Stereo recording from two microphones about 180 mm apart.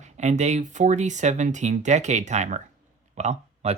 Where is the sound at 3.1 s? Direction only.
35° right (ahead or behind).